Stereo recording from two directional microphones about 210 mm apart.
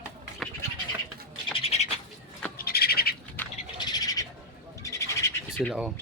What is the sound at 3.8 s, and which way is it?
Bird, 20° left (ahead or behind).